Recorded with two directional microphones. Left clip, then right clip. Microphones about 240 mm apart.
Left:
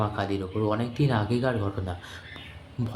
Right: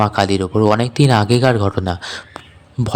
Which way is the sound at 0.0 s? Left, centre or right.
Right.